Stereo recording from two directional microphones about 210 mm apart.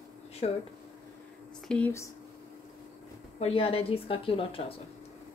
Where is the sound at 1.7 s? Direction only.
10° left (ahead or behind).